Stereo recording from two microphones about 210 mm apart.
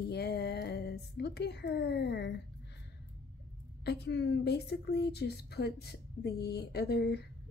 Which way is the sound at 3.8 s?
50° left (ahead or behind).